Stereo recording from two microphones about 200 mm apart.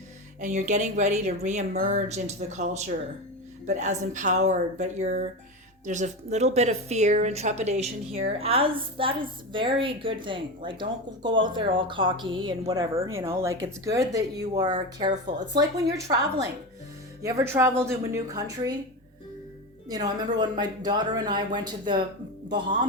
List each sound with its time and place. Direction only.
0.3 s a woman's voice: 35° right (ahead or behind); by 18.8 s 20° right (ahead or behind)
19.9 s speech: 20° right (ahead or behind)